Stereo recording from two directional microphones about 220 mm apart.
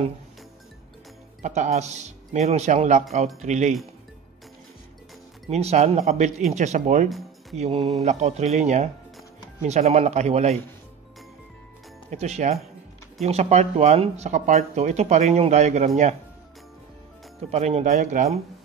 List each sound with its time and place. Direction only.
1.4 s speech: 30° right (ahead or behind)
5.5 s a man's voice: 30° right (ahead or behind)
12.1 s speech: 30° right (ahead or behind)
17.5 s speech: 30° right (ahead or behind)